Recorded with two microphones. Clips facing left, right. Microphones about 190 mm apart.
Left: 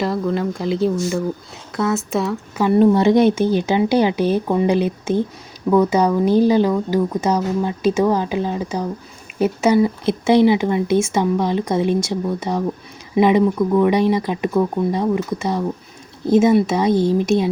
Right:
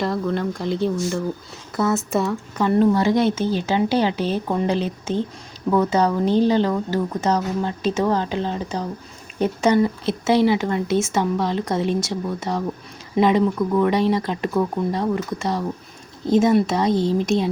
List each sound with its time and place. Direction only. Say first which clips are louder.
0.0 s speech: left 2 dB; centre (ahead or behind)
2.9 s speech: left 5 dB; 20° left (ahead or behind)